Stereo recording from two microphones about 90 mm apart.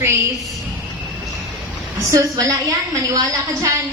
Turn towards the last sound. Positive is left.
turn(degrees=-35)  # may be behind; listen again after turning